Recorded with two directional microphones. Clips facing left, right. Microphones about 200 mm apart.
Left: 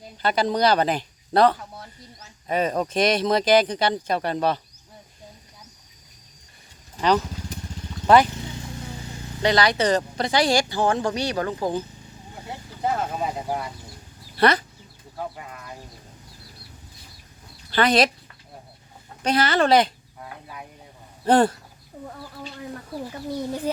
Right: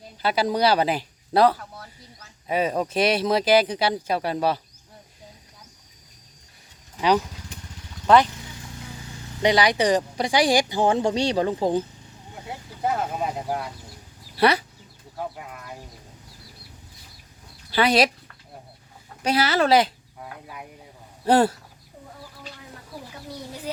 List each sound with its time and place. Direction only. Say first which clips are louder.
0.2 s speech: even; 5° right (ahead or behind)
1.5 s speech: left 1 dB; 15° left (ahead or behind)
2.5 s speech: even; 5° right (ahead or behind)
8.0 s speech: left 1 dB; 5° left (ahead or behind)
9.4 s speech: right 1 dB; 15° right (ahead or behind)
12.5 s speech: even; 5° right (ahead or behind)
17.7 s speech: even; 10° right (ahead or behind)
19.2 s chicken: left 1 dB; 5° right (ahead or behind)
21.2 s speech: left 1 dB; 5° right (ahead or behind)
23.7 s speech: left 4 dB; 55° left (ahead or behind)